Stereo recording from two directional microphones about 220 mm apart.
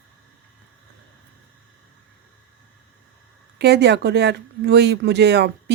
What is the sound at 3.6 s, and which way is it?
A woman's voice, 50° right (ahead or behind).